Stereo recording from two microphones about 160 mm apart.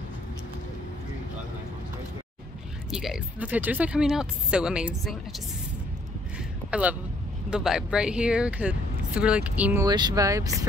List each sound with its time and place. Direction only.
2.9 s speech: 5° right (ahead or behind)
6.7 s speech: 10° right (ahead or behind)
9.8 s speech: 25° right (ahead or behind)